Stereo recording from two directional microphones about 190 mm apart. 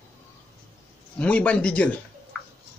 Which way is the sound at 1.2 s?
5° left (ahead or behind).